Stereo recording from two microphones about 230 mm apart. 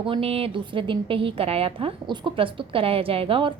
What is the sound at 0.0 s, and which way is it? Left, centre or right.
A woman's voice, right.